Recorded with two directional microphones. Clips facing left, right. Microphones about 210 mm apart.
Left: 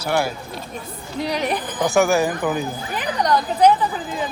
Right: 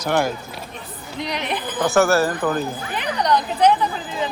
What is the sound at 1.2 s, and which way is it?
Speech, 40° left (ahead or behind).